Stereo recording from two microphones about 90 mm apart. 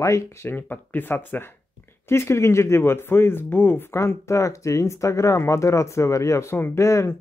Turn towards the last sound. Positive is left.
turn(degrees=35)  # may be behind; listen again after turning